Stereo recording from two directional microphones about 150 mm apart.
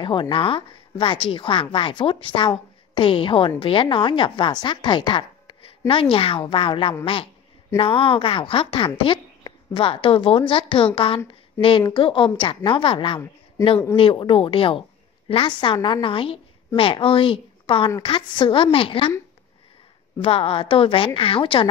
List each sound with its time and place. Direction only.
0.0 s a woman's voice: 35° left (ahead or behind)
11.9 s a woman's voice: 35° left (ahead or behind)
20.2 s a woman's voice: 40° left (ahead or behind)